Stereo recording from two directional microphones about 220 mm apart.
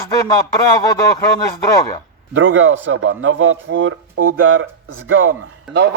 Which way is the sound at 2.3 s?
65° right (ahead or behind).